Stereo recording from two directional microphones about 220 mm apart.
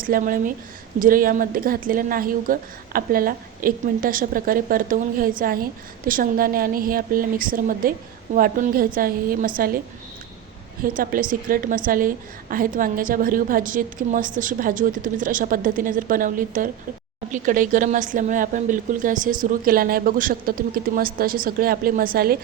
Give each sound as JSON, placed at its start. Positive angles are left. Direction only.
{"t": 0.0, "sound": "a woman's voice", "side_deg": -40}
{"t": 10.8, "sound": "a woman's voice", "side_deg": -40}